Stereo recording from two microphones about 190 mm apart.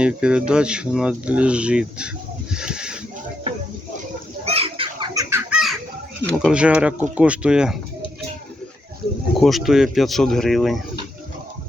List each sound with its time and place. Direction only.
0.0 s speech: 5° right (ahead or behind)
4.4 s chicken: 30° right (ahead or behind)
5.3 s chicken: 5° right (ahead or behind)
6.3 s speech: 5° right (ahead or behind)
9.4 s speech: centre (ahead or behind)